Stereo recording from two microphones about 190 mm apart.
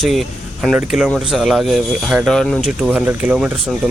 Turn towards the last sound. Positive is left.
turn(degrees=-5)  # may be behind; listen again after turning